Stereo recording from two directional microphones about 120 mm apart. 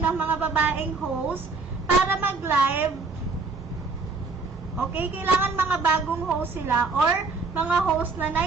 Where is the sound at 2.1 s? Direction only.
15° right (ahead or behind).